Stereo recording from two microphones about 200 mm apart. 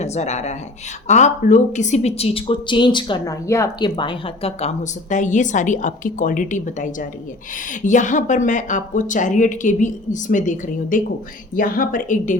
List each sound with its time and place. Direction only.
0.0 s speech: 35° left (ahead or behind)